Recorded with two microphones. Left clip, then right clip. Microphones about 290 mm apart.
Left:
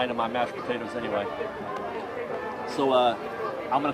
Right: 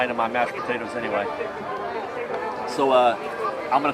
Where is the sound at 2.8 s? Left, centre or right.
Centre.